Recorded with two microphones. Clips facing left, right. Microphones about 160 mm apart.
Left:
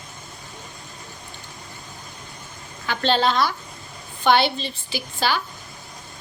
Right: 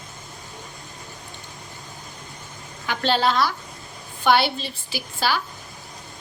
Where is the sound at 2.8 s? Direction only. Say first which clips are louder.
Left 1 dB; 10° right (ahead or behind).